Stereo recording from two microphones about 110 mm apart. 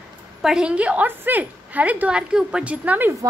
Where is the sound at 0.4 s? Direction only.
5° right (ahead or behind).